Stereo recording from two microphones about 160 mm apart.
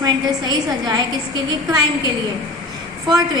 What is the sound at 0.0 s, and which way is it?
A woman's voice, 25° right (ahead or behind).